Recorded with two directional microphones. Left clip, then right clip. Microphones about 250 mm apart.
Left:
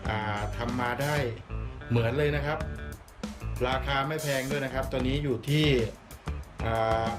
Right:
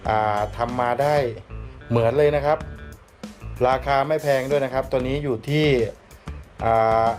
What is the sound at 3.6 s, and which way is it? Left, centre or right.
Speech, centre.